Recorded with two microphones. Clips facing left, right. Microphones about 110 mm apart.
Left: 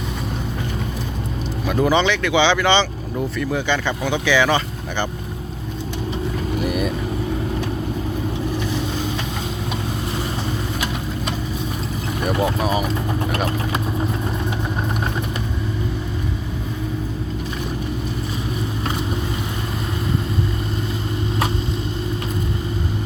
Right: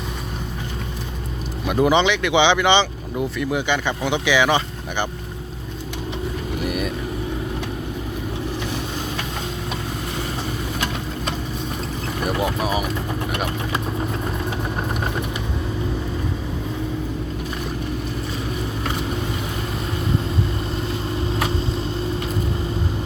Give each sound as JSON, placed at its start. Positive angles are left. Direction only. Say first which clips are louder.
{"t": 1.6, "sound": "speech", "louder": "right 1 dB", "side_deg": -15}
{"t": 6.6, "sound": "vehicle", "louder": "left 3 dB", "side_deg": 0}
{"t": 12.4, "sound": "speech", "louder": "left 3 dB", "side_deg": -5}